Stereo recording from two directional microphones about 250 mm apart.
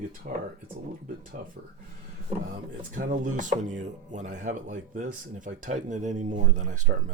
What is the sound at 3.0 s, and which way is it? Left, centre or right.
Speech, right.